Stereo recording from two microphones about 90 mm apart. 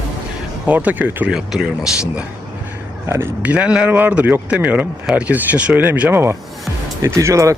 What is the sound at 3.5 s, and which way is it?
Speech, 10° right (ahead or behind).